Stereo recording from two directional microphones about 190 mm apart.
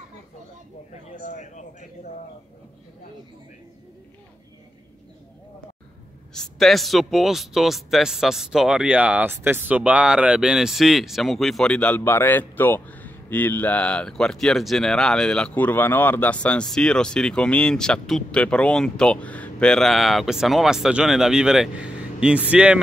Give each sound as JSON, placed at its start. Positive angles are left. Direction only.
{"t": 1.2, "sound": "speech", "side_deg": 40}
{"t": 6.3, "sound": "a man's voice", "side_deg": 0}